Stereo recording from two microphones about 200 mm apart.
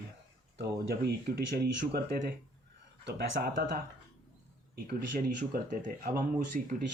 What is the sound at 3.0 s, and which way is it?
Speech, 55° right (ahead or behind).